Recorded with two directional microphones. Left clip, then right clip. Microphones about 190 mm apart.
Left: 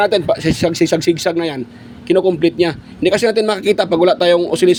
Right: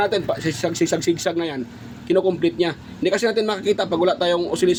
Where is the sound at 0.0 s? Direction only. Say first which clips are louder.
Left 7 dB; 45° left (ahead or behind).